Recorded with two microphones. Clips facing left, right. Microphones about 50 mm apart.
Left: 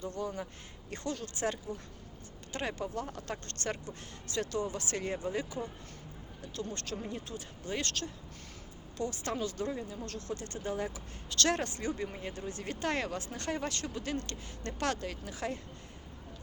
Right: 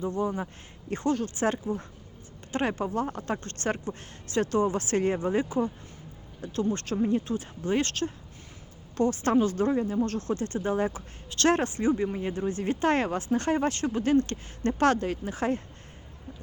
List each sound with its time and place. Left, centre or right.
0.0 s speech: right